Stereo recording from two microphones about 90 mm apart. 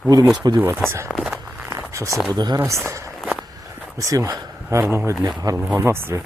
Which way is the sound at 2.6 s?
30° right (ahead or behind).